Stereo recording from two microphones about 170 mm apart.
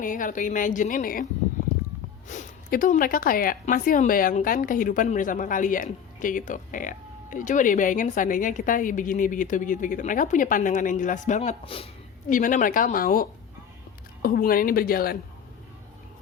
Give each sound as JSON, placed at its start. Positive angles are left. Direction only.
{"t": 0.0, "sound": "speech", "side_deg": 50}
{"t": 12.3, "sound": "a woman's voice", "side_deg": 50}